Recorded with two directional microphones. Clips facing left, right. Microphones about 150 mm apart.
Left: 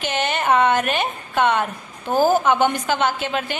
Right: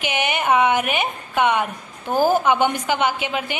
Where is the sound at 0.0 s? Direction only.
10° right (ahead or behind).